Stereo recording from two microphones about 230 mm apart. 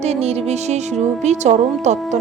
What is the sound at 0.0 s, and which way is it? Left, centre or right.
A woman's voice, right.